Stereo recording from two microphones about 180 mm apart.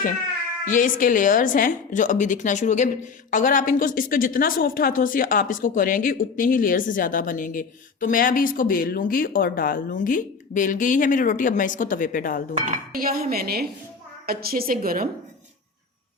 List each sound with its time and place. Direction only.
0.6 s a woman's voice: 45° left (ahead or behind)
12.6 s dishes: 50° right (ahead or behind)